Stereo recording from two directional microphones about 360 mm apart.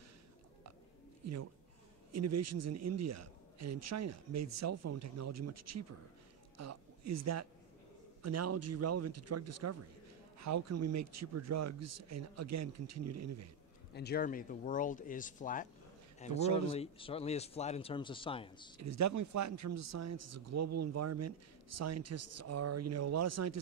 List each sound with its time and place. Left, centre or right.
1.2 s a man's voice: right
13.9 s speech: left
18.8 s speech: right